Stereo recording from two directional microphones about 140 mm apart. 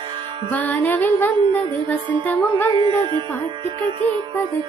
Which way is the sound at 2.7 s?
35° right (ahead or behind).